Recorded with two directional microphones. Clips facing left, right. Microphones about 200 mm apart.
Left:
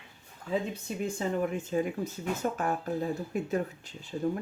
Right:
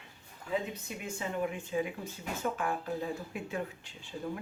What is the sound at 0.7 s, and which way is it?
Speech, 40° left (ahead or behind).